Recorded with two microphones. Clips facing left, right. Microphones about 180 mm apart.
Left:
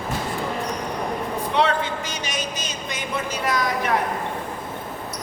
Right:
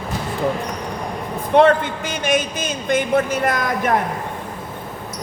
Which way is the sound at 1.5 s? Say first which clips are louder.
Right 9 dB; 55° right (ahead or behind).